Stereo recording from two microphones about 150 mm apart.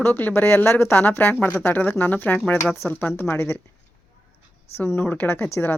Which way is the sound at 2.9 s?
10° left (ahead or behind).